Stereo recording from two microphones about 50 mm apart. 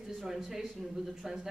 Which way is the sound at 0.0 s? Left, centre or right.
Centre.